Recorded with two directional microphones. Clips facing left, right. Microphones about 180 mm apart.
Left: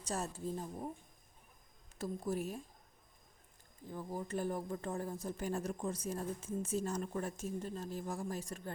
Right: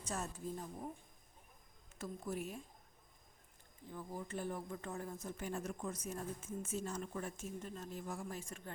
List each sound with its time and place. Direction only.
0.0 s speech: 35° left (ahead or behind)
2.0 s speech: 35° left (ahead or behind)
3.9 s speech: 40° left (ahead or behind)